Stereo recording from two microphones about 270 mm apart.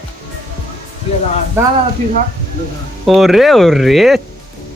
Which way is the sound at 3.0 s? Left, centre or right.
Centre.